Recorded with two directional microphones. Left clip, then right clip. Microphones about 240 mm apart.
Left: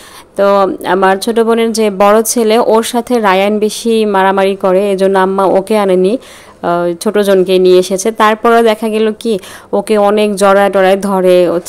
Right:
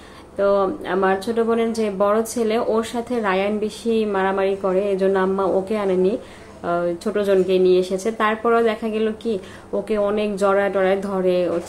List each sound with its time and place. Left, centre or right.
0.4 s speech: left